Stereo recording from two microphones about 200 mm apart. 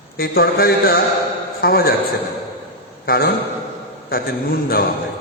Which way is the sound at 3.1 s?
50° left (ahead or behind).